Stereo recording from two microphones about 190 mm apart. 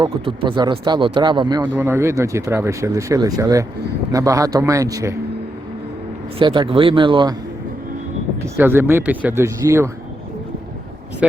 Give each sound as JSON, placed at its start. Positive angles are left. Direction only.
{"t": 0.0, "sound": "speech", "side_deg": -25}
{"t": 6.4, "sound": "speech", "side_deg": -25}
{"t": 8.4, "sound": "speech", "side_deg": -10}
{"t": 11.2, "sound": "speech", "side_deg": -5}